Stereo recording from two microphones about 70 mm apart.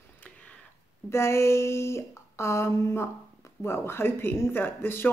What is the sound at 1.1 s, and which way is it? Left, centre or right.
Speech, left.